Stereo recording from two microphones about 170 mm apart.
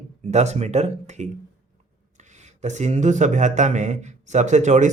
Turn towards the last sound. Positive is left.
turn(degrees=-45)  # may be behind; listen again after turning